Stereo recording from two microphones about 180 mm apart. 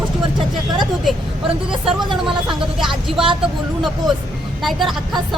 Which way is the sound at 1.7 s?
30° right (ahead or behind).